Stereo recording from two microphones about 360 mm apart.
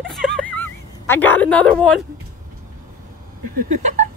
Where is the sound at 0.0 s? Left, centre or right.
Centre.